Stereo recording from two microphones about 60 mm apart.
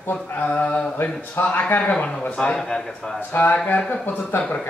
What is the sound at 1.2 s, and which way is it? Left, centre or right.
A man's voice, left.